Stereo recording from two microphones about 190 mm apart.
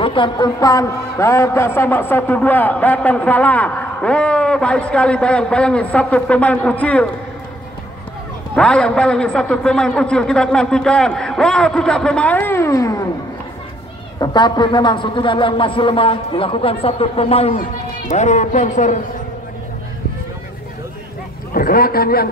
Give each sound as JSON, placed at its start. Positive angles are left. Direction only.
{"t": 0.0, "sound": "a man's voice", "side_deg": 25}
{"t": 8.5, "sound": "a man's voice", "side_deg": 5}
{"t": 14.2, "sound": "a man's voice", "side_deg": 25}
{"t": 21.5, "sound": "a man's voice", "side_deg": 50}